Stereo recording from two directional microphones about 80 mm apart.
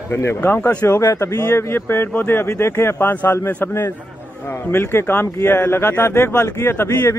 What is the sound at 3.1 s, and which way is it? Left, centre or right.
A man's voice, left.